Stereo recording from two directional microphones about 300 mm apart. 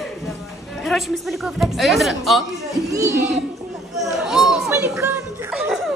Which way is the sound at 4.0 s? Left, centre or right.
Centre.